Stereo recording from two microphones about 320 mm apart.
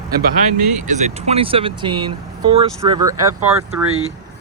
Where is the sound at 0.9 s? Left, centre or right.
Right.